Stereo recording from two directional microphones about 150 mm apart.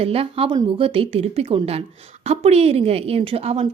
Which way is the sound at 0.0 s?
40° right (ahead or behind).